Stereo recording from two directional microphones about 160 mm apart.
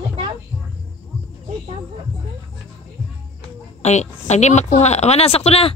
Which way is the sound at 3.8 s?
45° left (ahead or behind).